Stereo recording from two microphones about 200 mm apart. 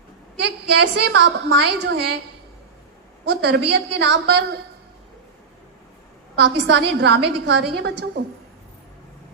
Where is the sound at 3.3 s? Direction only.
55° right (ahead or behind).